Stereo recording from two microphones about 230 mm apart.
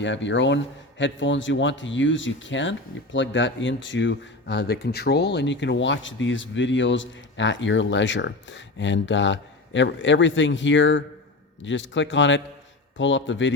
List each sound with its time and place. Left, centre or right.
0.0 s speech: left